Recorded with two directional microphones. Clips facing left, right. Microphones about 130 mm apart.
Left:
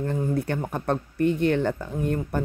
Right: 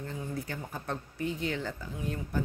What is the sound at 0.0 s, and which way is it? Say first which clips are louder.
Speech: left 11 dB; 55° left (ahead or behind).